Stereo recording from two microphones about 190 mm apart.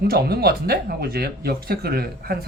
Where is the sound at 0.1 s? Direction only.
55° right (ahead or behind).